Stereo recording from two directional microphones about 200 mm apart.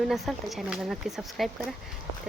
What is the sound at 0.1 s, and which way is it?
Speech, centre (ahead or behind).